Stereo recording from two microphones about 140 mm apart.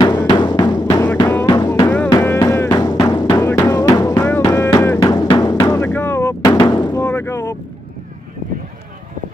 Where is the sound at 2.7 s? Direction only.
30° left (ahead or behind); by 6.3 s 15° left (ahead or behind).